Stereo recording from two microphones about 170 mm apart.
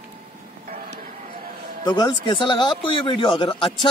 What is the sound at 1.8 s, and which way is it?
A man's voice, 25° left (ahead or behind).